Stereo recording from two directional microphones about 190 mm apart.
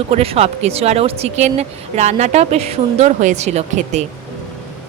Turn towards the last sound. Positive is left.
turn(degrees=-35)  # may be behind; listen again after turning